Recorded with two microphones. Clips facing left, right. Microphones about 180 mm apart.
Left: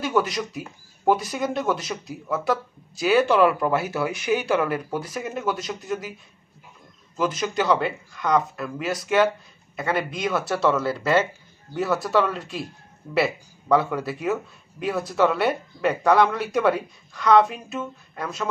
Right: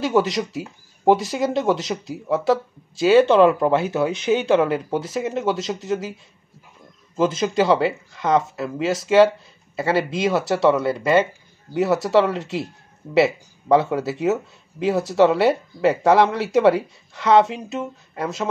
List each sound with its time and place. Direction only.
0.0 s speech: 25° right (ahead or behind)
7.2 s speech: 25° right (ahead or behind)